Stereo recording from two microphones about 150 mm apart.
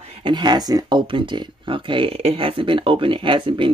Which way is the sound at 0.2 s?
30° right (ahead or behind).